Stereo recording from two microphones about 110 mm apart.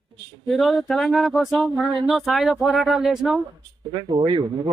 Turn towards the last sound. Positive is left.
turn(degrees=-50)  # may be behind; listen again after turning